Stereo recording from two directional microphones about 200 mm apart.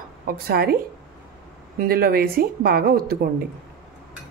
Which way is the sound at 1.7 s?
50° right (ahead or behind).